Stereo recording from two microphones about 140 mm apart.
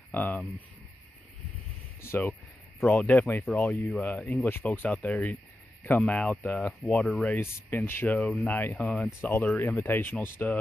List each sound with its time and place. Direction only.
0.1 s speech: 15° left (ahead or behind)
2.0 s speech: 20° left (ahead or behind)